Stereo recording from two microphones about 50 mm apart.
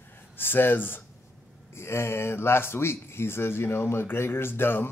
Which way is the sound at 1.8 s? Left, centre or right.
Left.